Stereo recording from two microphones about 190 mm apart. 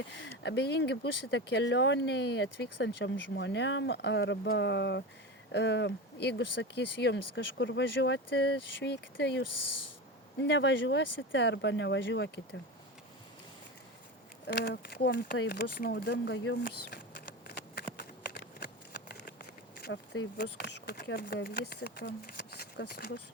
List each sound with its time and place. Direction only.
0.4 s speech: 65° left (ahead or behind)
14.4 s speech: 60° left (ahead or behind)
16.6 s a sound: 55° left (ahead or behind)
18.6 s speech: 55° left (ahead or behind)